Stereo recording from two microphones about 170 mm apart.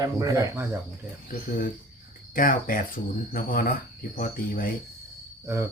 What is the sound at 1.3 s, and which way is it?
Speech, 55° left (ahead or behind).